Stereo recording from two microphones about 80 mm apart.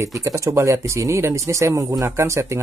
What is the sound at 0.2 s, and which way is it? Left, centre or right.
Speech, right.